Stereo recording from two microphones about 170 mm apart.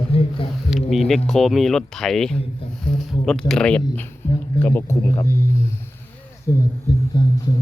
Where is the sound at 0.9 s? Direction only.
Centre (ahead or behind); by 5.5 s 15° left (ahead or behind).